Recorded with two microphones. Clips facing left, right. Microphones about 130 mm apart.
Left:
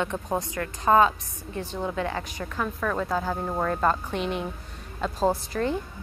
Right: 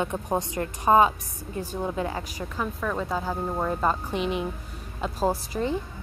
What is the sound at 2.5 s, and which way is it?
Speech, 5° right (ahead or behind).